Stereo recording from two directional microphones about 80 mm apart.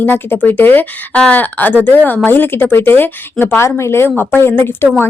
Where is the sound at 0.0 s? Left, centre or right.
Left.